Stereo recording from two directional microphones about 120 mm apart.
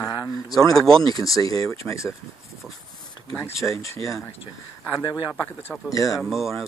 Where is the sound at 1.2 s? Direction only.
30° left (ahead or behind).